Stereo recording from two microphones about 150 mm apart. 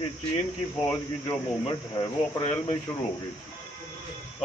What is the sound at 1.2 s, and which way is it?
Speech, 25° left (ahead or behind).